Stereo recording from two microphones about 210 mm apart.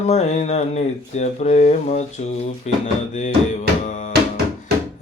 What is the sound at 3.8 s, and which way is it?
Music, 35° left (ahead or behind).